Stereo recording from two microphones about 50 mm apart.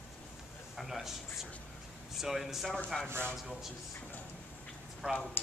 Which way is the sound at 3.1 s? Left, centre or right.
Right.